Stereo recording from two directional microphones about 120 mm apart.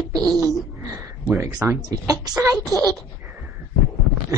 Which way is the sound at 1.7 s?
25° right (ahead or behind).